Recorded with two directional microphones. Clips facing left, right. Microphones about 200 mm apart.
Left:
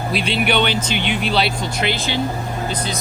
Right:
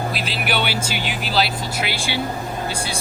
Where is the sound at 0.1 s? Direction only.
Centre (ahead or behind).